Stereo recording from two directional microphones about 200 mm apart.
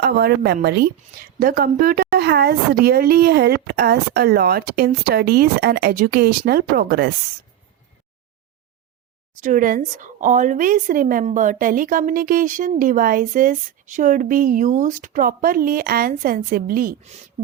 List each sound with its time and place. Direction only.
0.0 s speech: 50° right (ahead or behind)
9.3 s speech: 40° right (ahead or behind)